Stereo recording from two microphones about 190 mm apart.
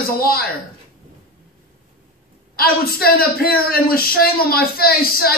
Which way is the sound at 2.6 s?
50° left (ahead or behind).